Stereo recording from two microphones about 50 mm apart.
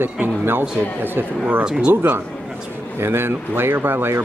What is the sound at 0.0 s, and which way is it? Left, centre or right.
Speech, right.